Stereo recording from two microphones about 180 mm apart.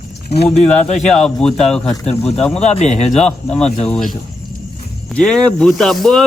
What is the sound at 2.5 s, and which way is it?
Speech, 35° left (ahead or behind).